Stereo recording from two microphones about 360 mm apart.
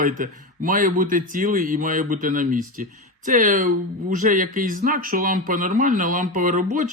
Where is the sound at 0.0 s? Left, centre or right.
Right.